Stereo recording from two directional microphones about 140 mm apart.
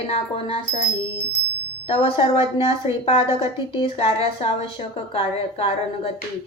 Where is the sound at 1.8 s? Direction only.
40° left (ahead or behind).